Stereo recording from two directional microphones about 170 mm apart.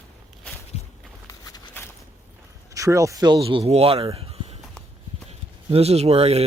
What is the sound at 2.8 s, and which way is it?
Speech, 20° right (ahead or behind).